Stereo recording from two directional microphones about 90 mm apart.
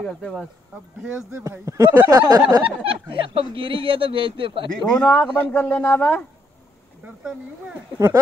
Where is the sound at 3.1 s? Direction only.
80° right.